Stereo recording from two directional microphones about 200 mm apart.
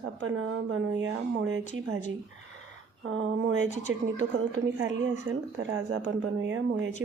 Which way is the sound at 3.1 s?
70° right (ahead or behind).